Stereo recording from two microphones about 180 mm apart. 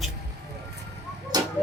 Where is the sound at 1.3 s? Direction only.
20° right (ahead or behind).